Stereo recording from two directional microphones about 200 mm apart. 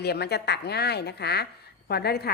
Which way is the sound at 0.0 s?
55° left (ahead or behind).